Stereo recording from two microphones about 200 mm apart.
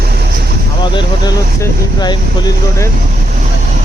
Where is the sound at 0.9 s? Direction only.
20° left (ahead or behind).